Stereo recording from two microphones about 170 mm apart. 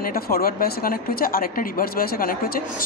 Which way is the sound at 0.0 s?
60° left (ahead or behind).